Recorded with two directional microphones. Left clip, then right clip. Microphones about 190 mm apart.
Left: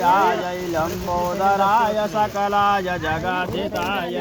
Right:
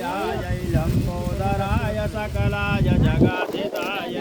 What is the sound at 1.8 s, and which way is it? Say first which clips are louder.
Speech: left 7 dB; 5° right (ahead or behind).